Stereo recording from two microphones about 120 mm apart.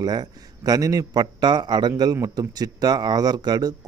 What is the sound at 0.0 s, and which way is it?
A man's voice, 35° right (ahead or behind).